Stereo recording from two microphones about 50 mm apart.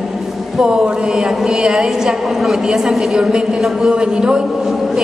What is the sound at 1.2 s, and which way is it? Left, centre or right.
A woman's voice, centre.